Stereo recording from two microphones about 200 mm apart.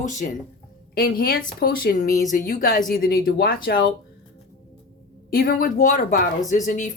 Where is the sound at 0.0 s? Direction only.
40° left (ahead or behind).